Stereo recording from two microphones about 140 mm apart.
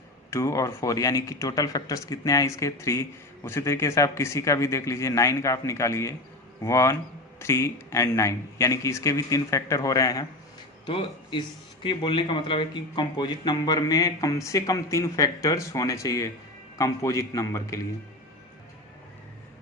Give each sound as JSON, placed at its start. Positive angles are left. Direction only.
{"t": 0.3, "sound": "speech", "side_deg": 20}
{"t": 10.8, "sound": "speech", "side_deg": 35}